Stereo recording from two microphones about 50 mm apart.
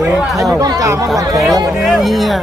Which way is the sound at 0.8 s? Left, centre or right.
Right.